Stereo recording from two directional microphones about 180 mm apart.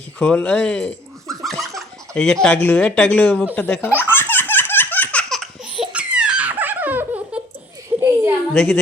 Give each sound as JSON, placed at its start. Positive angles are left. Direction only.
{"t": 0.2, "sound": "speech", "side_deg": 5}
{"t": 3.8, "sound": "laughter", "side_deg": 10}
{"t": 7.9, "sound": "a sound", "side_deg": -15}
{"t": 8.5, "sound": "a woman's voice", "side_deg": 0}